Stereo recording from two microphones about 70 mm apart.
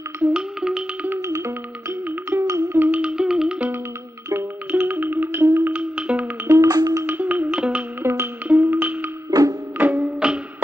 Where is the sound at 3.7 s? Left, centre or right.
Right.